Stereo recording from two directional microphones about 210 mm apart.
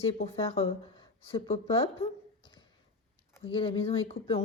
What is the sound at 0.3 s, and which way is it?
Speech, 25° left (ahead or behind).